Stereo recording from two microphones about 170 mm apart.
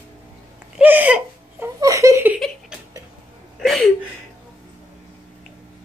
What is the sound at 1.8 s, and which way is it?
Laughter, 20° right (ahead or behind).